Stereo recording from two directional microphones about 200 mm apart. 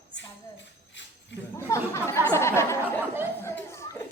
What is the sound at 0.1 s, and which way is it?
Music, 65° left (ahead or behind).